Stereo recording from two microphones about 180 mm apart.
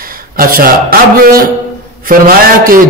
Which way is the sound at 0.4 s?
55° right (ahead or behind).